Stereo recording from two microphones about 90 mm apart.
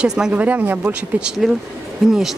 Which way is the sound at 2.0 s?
Centre (ahead or behind).